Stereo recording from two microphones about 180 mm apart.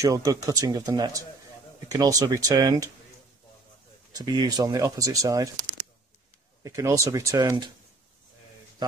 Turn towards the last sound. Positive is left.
turn(degrees=-20)  # may be behind; listen again after turning